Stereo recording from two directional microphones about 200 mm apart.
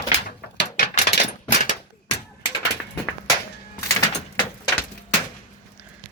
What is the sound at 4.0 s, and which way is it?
Vehicle, 20° left (ahead or behind).